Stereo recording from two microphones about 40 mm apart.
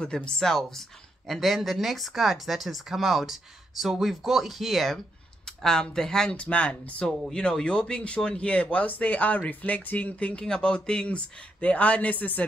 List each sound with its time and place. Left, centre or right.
0.0 s speech: left
0.4 s speech: centre
4.9 s speech: centre
6.3 s speech: left
10.4 s speech: centre; by 12.4 s left